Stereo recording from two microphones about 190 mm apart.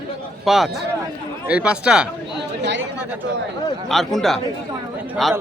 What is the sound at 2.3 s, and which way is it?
Chatter, 65° right (ahead or behind).